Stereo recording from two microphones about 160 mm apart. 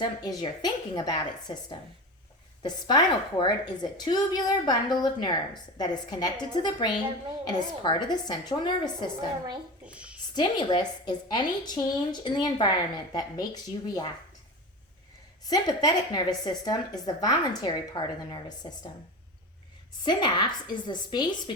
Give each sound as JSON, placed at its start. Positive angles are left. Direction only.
{"t": 0.0, "sound": "a woman's voice", "side_deg": 30}
{"t": 2.6, "sound": "a woman's voice", "side_deg": 25}
{"t": 9.8, "sound": "a sound", "side_deg": -10}
{"t": 10.3, "sound": "a woman's voice", "side_deg": 30}
{"t": 15.4, "sound": "a woman's voice", "side_deg": 25}
{"t": 20.0, "sound": "a woman's voice", "side_deg": 30}